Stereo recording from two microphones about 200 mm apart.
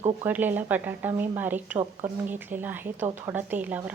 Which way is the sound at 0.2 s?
10° right (ahead or behind).